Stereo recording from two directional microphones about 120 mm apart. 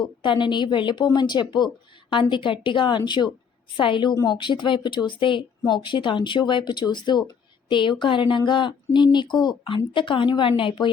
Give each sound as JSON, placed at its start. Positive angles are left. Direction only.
{"t": 0.0, "sound": "a woman's voice", "side_deg": 40}